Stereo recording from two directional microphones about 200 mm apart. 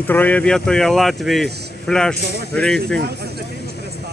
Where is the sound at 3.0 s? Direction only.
55° right (ahead or behind).